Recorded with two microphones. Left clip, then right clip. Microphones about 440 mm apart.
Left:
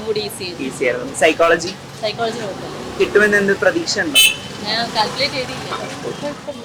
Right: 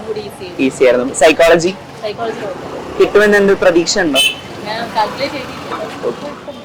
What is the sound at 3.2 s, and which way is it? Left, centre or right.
Speech, right.